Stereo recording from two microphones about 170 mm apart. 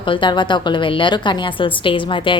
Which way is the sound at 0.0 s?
30° left (ahead or behind).